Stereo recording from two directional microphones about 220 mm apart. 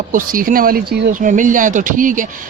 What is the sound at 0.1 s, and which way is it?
Speech, 40° right (ahead or behind).